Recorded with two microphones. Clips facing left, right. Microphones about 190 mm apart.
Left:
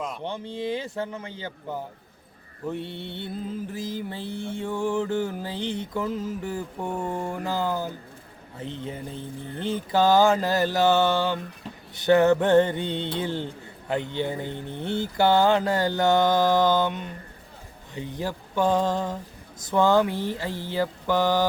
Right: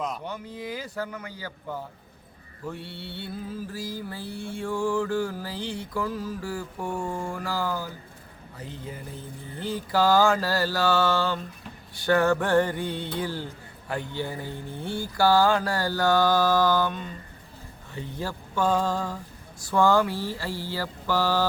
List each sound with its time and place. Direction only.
0.2 s mantra: 25° left (ahead or behind)